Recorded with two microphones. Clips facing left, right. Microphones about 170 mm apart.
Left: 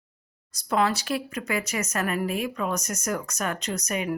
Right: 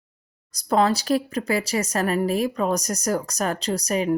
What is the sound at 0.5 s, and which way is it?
Speech, 35° right (ahead or behind).